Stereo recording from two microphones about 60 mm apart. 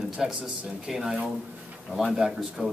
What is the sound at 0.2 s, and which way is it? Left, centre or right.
Speech, centre.